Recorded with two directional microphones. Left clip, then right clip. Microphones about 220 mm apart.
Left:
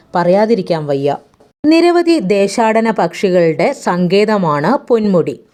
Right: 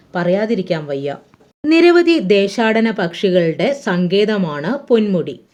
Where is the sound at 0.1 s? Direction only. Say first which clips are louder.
Left 6 dB; 35° left (ahead or behind).